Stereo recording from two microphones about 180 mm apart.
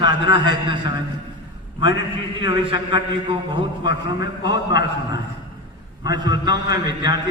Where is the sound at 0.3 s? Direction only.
25° right (ahead or behind).